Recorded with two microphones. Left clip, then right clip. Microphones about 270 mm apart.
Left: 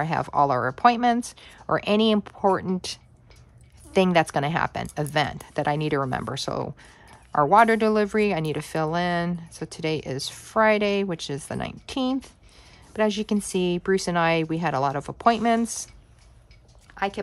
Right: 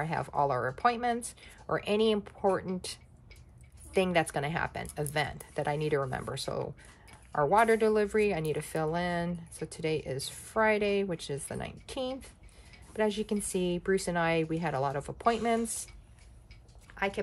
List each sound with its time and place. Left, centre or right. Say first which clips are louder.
0.0 s speech: left 8 dB; left
16.9 s speech: left 5 dB; centre